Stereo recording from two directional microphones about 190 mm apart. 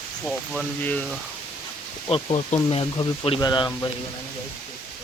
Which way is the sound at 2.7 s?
30° left (ahead or behind).